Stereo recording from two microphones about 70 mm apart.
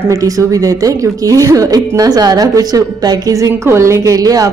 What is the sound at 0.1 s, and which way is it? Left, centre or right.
A woman's voice, right.